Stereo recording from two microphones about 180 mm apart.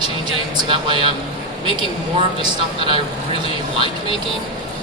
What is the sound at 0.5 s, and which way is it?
Speech, 25° right (ahead or behind).